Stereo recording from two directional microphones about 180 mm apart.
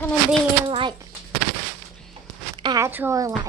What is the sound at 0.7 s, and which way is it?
Speech, 30° right (ahead or behind).